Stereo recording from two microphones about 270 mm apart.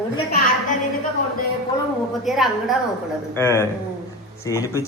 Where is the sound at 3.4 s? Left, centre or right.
Centre.